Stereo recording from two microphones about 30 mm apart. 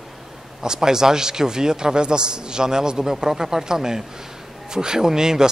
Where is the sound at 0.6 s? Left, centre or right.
Right.